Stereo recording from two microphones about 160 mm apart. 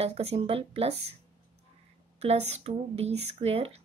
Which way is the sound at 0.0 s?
40° right (ahead or behind).